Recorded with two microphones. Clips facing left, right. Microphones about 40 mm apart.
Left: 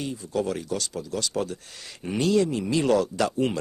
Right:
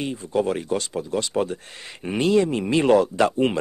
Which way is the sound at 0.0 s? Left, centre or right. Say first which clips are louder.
Right 4 dB; right.